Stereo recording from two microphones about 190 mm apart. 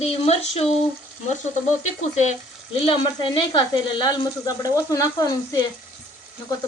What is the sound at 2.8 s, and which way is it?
Speech, 30° left (ahead or behind).